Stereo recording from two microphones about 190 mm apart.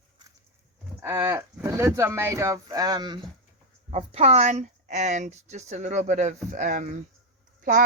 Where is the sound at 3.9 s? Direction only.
30° right (ahead or behind).